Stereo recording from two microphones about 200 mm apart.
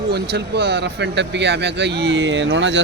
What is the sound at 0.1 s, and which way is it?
Speech, 55° right (ahead or behind).